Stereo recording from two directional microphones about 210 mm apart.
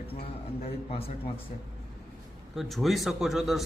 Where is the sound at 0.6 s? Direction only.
25° left (ahead or behind).